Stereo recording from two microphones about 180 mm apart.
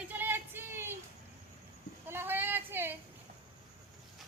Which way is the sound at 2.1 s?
10° right (ahead or behind).